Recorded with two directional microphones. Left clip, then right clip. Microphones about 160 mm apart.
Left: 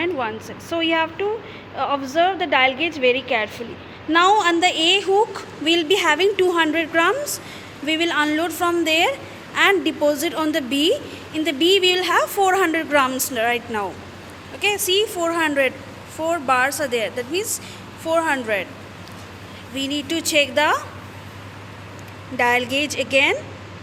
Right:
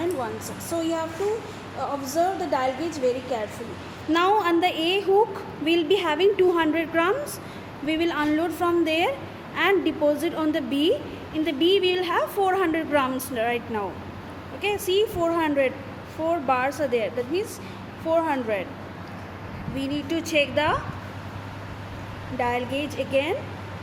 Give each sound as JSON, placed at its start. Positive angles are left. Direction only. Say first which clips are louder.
{"t": 0.7, "sound": "a woman's voice", "louder": "left 7 dB", "side_deg": 30}
{"t": 4.1, "sound": "a woman's voice", "louder": "left 5 dB", "side_deg": 10}
{"t": 19.7, "sound": "a woman's voice", "louder": "left 4 dB", "side_deg": 10}
{"t": 22.4, "sound": "a woman's voice", "louder": "left 7 dB", "side_deg": 15}